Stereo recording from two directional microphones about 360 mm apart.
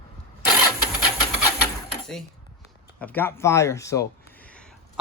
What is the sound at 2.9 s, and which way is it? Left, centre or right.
Speech, centre.